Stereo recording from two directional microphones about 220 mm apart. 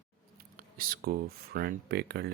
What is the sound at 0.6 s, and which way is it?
Speech, 40° right (ahead or behind).